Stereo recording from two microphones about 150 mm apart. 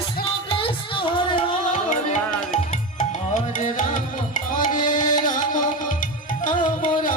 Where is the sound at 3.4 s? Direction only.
55° left (ahead or behind).